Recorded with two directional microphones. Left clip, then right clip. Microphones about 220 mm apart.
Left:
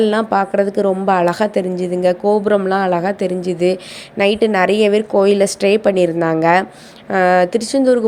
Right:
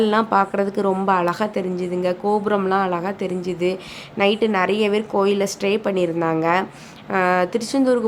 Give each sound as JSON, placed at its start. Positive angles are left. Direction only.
{"t": 0.0, "sound": "a woman's voice", "side_deg": 15}